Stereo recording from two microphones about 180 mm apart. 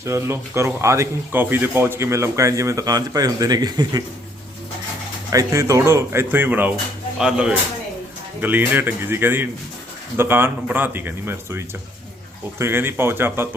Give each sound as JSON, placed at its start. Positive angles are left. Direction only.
{"t": 0.0, "sound": "speech", "side_deg": -15}
{"t": 5.3, "sound": "speech", "side_deg": -20}